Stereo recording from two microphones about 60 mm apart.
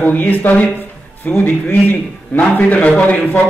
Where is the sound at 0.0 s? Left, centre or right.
Left.